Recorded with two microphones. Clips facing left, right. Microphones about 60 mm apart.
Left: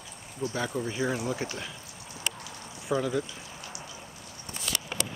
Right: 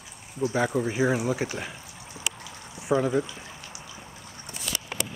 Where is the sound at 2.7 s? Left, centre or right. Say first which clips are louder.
Right 5 dB; right.